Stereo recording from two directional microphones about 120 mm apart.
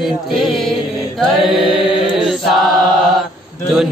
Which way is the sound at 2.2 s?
Centre (ahead or behind).